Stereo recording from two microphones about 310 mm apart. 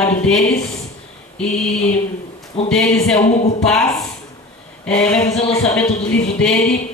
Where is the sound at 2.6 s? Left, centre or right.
Centre.